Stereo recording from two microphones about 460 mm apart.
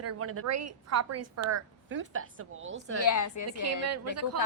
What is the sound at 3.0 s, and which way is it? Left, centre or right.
Speech, left.